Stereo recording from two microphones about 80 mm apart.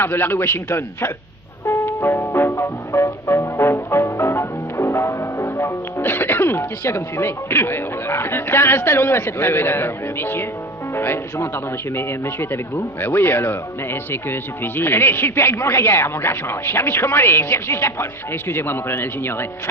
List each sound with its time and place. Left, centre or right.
0.0 s speech: left
1.6 s music: left
10.9 s speech: left